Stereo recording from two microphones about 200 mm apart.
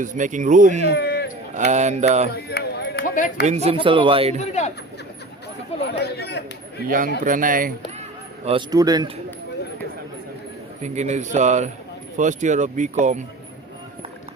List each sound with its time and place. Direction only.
0.0 s speech: 40° right (ahead or behind)
0.9 s a sound: 55° left (ahead or behind)
1.5 s speech: 35° right (ahead or behind)
2.3 s speech: 55° left (ahead or behind)
3.4 s speech: 35° right (ahead or behind)
4.4 s speech: 35° left (ahead or behind)
5.8 s speech: 55° left (ahead or behind)
6.8 s speech: 45° right (ahead or behind)
8.4 s speech: 20° right (ahead or behind)
10.8 s speech: 35° right (ahead or behind)